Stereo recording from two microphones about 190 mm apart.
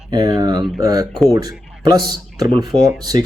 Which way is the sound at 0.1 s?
20° right (ahead or behind).